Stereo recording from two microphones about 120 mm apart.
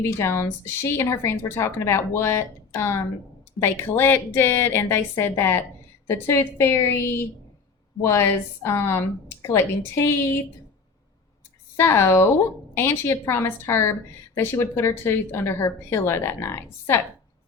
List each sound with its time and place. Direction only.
0.0 s speech: 20° left (ahead or behind)
11.8 s speech: 20° left (ahead or behind)